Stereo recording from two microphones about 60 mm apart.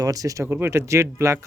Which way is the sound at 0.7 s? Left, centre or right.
Right.